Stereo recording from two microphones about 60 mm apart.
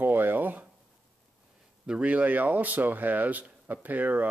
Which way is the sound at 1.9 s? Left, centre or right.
Right.